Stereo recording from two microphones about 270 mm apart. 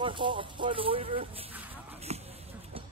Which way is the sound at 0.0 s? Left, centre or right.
Centre.